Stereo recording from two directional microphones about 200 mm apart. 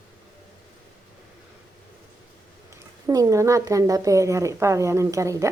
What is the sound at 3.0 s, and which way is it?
A woman's voice, 15° right (ahead or behind).